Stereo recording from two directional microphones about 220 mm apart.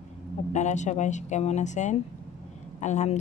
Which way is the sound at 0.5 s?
30° left (ahead or behind).